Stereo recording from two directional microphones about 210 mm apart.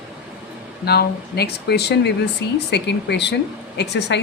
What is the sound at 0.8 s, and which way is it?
A woman's voice, 50° left (ahead or behind).